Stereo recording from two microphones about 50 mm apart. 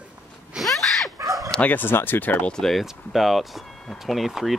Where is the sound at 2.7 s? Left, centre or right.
Centre.